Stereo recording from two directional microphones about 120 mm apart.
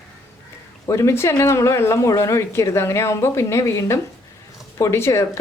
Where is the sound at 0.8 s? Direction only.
25° left (ahead or behind).